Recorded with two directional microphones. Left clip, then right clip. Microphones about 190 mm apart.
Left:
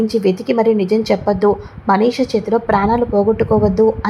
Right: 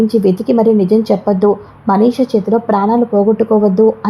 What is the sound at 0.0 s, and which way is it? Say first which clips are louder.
A woman's voice: right 3 dB; 15° right (ahead or behind).